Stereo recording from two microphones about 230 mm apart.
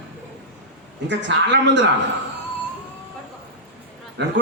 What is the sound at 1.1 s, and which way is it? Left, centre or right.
Speech, right.